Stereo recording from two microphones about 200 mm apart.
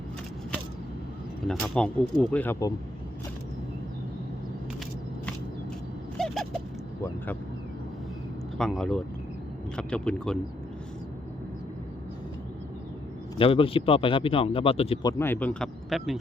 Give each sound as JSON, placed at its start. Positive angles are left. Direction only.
{"t": 1.5, "sound": "speech", "side_deg": 0}
{"t": 6.1, "sound": "a sound", "side_deg": 5}
{"t": 8.5, "sound": "speech", "side_deg": 5}
{"t": 13.4, "sound": "speech", "side_deg": 25}
{"t": 15.2, "sound": "speech", "side_deg": 10}